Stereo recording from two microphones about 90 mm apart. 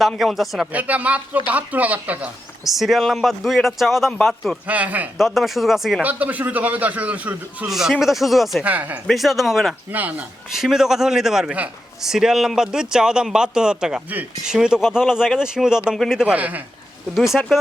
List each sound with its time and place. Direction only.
0.2 s speech: centre (ahead or behind)
0.7 s speech: 15° right (ahead or behind)
2.6 s speech: centre (ahead or behind)
4.6 s speech: 15° right (ahead or behind)
5.1 s speech: centre (ahead or behind)
6.0 s speech: 20° right (ahead or behind)
7.7 s speech: 5° right (ahead or behind)
8.6 s speech: 20° right (ahead or behind)
9.0 s speech: centre (ahead or behind)
9.9 s speech: 20° right (ahead or behind)
10.5 s speech: 5° right (ahead or behind)
16.2 s speech: 15° right (ahead or behind)
17.2 s speech: centre (ahead or behind)